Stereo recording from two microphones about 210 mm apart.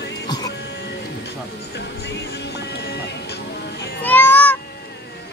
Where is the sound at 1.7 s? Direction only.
55° left (ahead or behind).